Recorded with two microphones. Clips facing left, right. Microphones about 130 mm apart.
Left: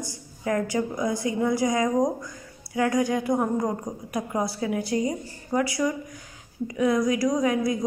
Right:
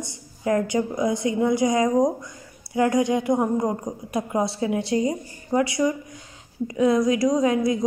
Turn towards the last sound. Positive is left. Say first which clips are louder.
# right 3 dB
turn(degrees=-25)  # may be behind; listen again after turning